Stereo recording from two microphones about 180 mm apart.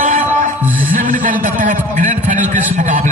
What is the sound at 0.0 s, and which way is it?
Music, 50° right (ahead or behind).